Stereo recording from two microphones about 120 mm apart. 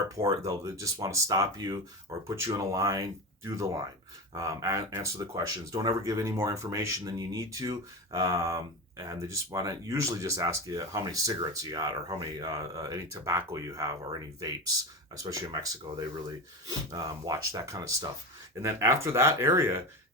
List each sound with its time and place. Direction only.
0.2 s speech: 25° right (ahead or behind)